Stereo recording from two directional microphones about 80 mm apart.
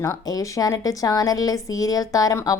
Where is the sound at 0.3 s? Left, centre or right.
Left.